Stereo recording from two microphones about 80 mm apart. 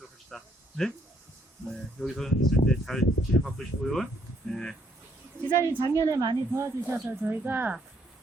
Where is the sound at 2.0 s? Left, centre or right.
Centre.